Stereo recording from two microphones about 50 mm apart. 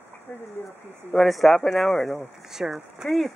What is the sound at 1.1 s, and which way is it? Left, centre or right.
Speech, centre.